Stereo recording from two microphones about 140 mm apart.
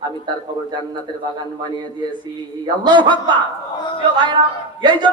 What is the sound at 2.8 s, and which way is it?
Speech, 35° right (ahead or behind).